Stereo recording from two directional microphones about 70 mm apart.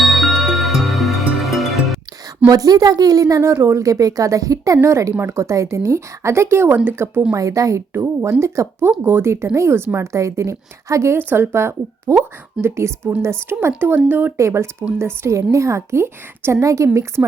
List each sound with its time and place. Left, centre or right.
0.0 s music: centre
2.5 s a woman's voice: right
3.5 s a woman's voice: right
7.1 s speech: right
7.3 s a woman's voice: right
7.9 s a woman's voice: right
11.2 s speech: right
14.3 s a woman's voice: right